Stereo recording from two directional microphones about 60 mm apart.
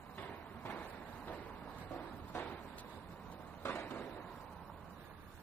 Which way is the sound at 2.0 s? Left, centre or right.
Left.